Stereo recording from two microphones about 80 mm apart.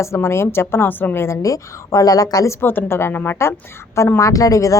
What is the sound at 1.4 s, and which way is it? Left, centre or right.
Speech, left.